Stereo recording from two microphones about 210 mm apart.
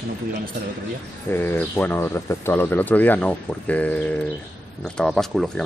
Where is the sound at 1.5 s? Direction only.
10° left (ahead or behind).